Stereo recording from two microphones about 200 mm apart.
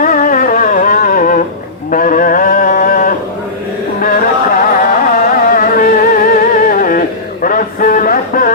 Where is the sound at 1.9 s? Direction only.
40° left (ahead or behind).